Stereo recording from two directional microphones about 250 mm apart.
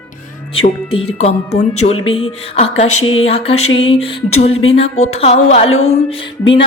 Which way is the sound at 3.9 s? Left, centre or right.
Left.